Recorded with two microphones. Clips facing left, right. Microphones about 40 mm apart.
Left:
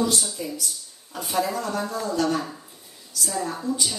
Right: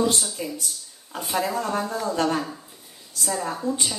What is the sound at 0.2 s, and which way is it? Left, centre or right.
Speech, centre.